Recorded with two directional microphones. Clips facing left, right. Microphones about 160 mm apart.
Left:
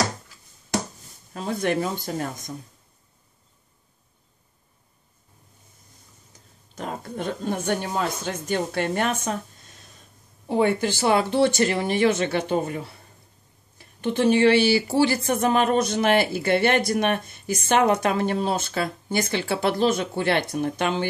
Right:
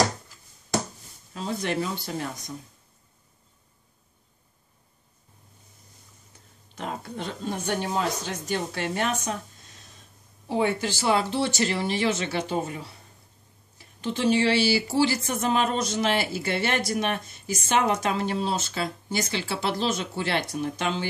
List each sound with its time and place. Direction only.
1.3 s speech: 50° left (ahead or behind)
6.7 s a sound: 40° left (ahead or behind)
8.2 s speech: 55° left (ahead or behind)
10.5 s speech: 55° left (ahead or behind)